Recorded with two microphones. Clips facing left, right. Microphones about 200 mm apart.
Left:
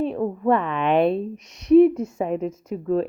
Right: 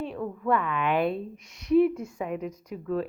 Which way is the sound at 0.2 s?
40° left (ahead or behind).